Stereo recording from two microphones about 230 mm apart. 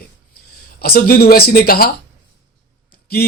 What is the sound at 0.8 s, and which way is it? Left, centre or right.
Speech, left.